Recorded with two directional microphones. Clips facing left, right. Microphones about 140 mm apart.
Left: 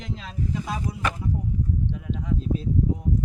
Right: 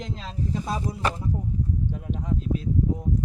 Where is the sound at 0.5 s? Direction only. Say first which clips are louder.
Right 2 dB; 35° right (ahead or behind).